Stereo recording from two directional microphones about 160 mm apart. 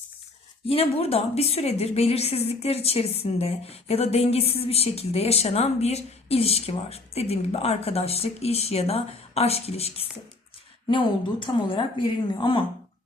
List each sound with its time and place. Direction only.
0.7 s a woman's voice: 35° left (ahead or behind)